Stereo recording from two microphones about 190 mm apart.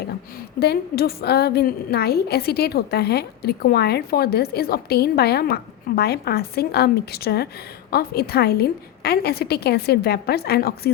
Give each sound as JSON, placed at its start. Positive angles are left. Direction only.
{"t": 0.6, "sound": "a woman's voice", "side_deg": 55}